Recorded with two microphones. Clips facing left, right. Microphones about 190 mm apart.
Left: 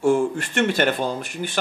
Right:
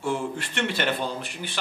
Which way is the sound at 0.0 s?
45° left (ahead or behind).